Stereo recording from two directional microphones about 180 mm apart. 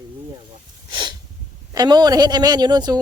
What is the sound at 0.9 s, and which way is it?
Sneeze, 25° right (ahead or behind).